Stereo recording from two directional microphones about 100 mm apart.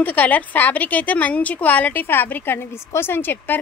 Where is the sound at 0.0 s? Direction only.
15° left (ahead or behind).